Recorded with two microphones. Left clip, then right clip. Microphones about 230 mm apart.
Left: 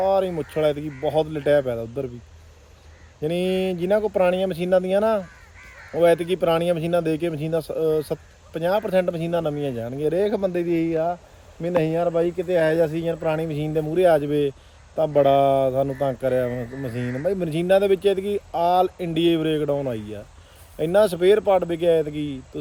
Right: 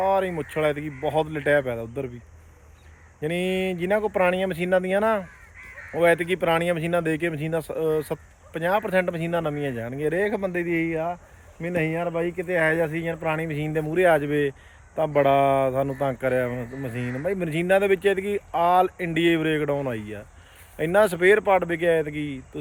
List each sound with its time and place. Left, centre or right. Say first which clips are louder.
0.0 s speech: left 2 dB; centre
3.2 s speech: left 2 dB; centre
16.5 s speech: left 2 dB; centre
17.2 s speech: left 2 dB; centre